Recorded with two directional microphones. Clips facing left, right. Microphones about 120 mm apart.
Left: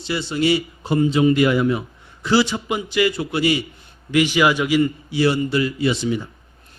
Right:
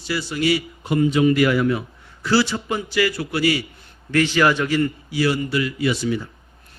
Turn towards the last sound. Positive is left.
turn(degrees=20)  # may be behind; listen again after turning